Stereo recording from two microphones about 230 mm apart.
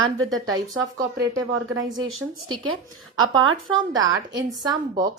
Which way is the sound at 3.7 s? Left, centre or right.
Centre.